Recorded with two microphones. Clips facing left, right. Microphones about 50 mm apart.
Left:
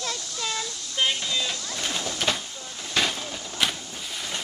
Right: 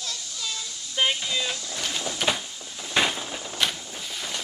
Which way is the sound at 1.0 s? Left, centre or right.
Centre.